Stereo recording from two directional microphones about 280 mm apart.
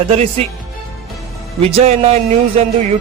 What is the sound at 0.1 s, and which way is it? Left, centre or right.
Speech, right.